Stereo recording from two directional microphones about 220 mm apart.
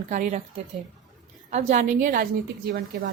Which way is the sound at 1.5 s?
35° right (ahead or behind).